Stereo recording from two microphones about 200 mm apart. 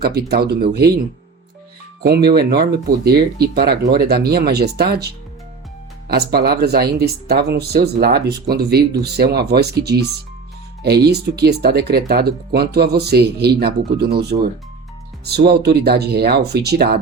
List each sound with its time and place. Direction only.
0.0 s speech: 50° right (ahead or behind)
2.0 s speech: 50° right (ahead or behind)
6.1 s speech: 50° right (ahead or behind)